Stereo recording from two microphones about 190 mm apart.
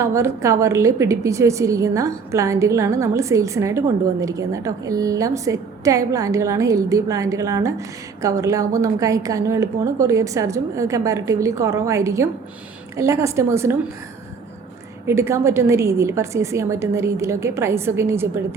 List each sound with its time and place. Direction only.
0.0 s a woman's voice: 15° right (ahead or behind)
15.0 s a woman's voice: 15° right (ahead or behind)